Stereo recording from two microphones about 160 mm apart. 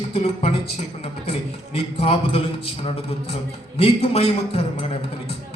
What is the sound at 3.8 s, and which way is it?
Speech, 40° left (ahead or behind).